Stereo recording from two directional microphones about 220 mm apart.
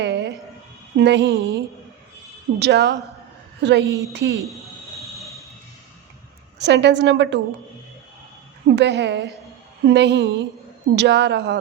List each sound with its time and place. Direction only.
0.0 s a woman's voice: 50° right (ahead or behind)
2.6 s a woman's voice: 50° right (ahead or behind)
6.6 s a woman's voice: 50° right (ahead or behind)
8.6 s a woman's voice: 50° right (ahead or behind)